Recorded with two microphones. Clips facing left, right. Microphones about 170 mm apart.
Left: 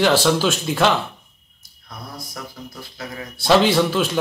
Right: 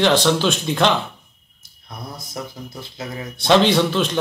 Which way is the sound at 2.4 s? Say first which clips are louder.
Right 6 dB; 25° right (ahead or behind).